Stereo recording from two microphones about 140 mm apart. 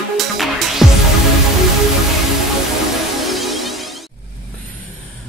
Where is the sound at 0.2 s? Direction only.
Centre (ahead or behind).